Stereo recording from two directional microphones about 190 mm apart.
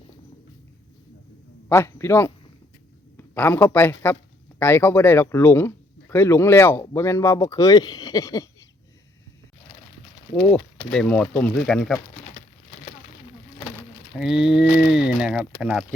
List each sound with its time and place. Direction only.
1.7 s speech: 15° left (ahead or behind)
10.9 s speech: 5° left (ahead or behind)
14.2 s speech: 5° right (ahead or behind)